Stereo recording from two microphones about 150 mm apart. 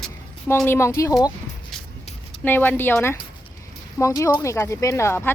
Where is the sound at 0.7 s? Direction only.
20° left (ahead or behind).